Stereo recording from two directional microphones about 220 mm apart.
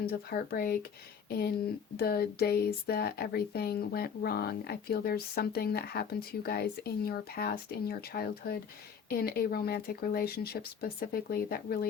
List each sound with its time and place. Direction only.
0.0 s speech: 45° left (ahead or behind)